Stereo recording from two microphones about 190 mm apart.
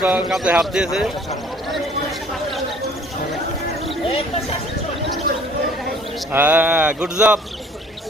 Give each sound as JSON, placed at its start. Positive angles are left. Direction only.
{"t": 0.0, "sound": "a man's voice", "side_deg": -5}
{"t": 4.0, "sound": "a sound", "side_deg": 30}
{"t": 6.3, "sound": "speech", "side_deg": -10}